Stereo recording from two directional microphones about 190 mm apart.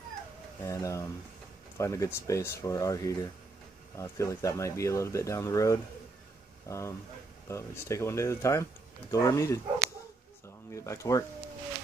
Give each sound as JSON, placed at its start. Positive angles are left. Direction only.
{"t": 0.6, "sound": "speech", "side_deg": 15}
{"t": 10.7, "sound": "speech", "side_deg": 15}